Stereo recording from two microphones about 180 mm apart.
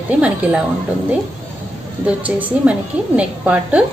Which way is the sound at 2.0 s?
5° right (ahead or behind).